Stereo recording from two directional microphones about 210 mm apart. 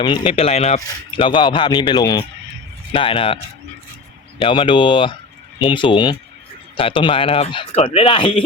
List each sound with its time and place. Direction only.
0.0 s speech: 20° left (ahead or behind)
4.4 s speech: 25° left (ahead or behind)